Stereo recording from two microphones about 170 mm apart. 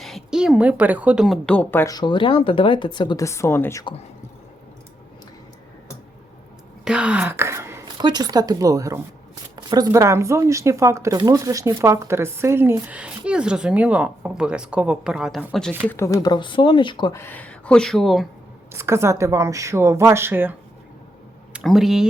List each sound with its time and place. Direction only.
0.0 s a woman's voice: centre (ahead or behind); by 3.8 s 15° left (ahead or behind)
6.8 s a sound: 5° right (ahead or behind)
8.0 s speech: 25° right (ahead or behind); by 15.7 s centre (ahead or behind)
15.9 s speech: 15° left (ahead or behind)
17.2 s speech: 10° left (ahead or behind)
18.7 s speech: 15° right (ahead or behind)
21.5 s speech: centre (ahead or behind)